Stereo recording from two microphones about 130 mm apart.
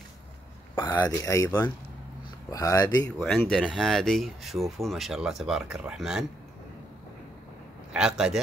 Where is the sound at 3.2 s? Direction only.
Centre (ahead or behind).